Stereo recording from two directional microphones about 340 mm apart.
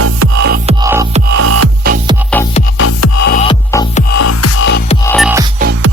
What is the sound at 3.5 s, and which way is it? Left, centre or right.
Music, centre.